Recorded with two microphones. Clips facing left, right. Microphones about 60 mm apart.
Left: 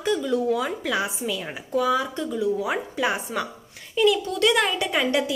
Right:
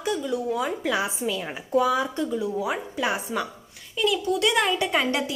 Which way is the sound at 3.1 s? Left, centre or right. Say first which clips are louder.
Even; centre.